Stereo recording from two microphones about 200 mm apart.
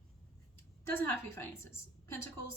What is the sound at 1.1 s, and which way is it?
Speech, 10° left (ahead or behind).